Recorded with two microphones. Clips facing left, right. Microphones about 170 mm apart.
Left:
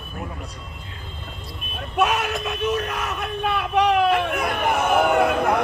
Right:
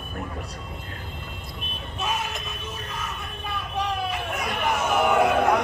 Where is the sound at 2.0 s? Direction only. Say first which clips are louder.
Left 9 dB; 70° left (ahead or behind).